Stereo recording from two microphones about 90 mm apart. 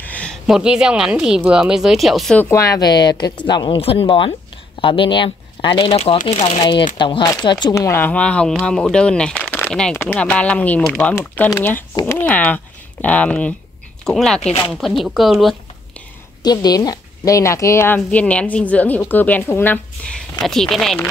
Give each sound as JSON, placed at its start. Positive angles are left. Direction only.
{"t": 0.0, "sound": "a sound", "side_deg": 15}
{"t": 0.5, "sound": "speech", "side_deg": -10}
{"t": 2.5, "sound": "a woman's voice", "side_deg": 35}
{"t": 2.8, "sound": "a woman's voice", "side_deg": 50}
{"t": 4.8, "sound": "speech", "side_deg": 70}
{"t": 6.7, "sound": "speech", "side_deg": 65}
{"t": 7.2, "sound": "a woman's voice", "side_deg": 50}
{"t": 7.7, "sound": "a woman's voice", "side_deg": 35}
{"t": 8.0, "sound": "a woman's voice", "side_deg": 15}
{"t": 16.4, "sound": "a woman's voice", "side_deg": 50}
{"t": 20.1, "sound": "speech", "side_deg": 10}